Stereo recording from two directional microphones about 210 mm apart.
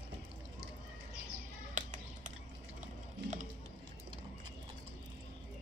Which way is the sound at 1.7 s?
35° right (ahead or behind).